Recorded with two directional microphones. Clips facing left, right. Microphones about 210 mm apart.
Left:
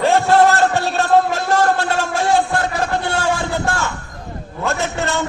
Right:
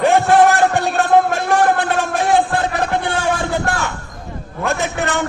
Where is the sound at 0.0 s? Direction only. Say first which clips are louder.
Right 1 dB; 15° right (ahead or behind).